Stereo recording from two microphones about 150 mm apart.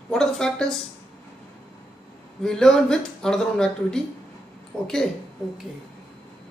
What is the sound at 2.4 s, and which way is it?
Speech, 5° left (ahead or behind).